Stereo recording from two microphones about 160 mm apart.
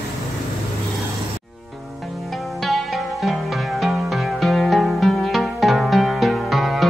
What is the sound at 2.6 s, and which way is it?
Music, centre (ahead or behind).